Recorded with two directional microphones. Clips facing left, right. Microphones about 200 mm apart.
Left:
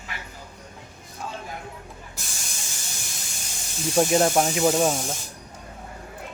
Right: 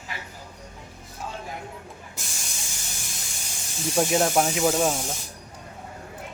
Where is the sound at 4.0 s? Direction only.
Centre (ahead or behind).